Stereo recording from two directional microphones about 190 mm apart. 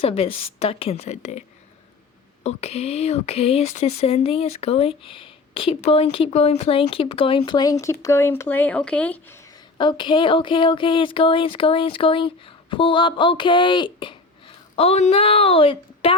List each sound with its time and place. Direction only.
0.0 s speech: 30° left (ahead or behind); by 9.4 s 10° left (ahead or behind)
9.7 s speech: 25° left (ahead or behind)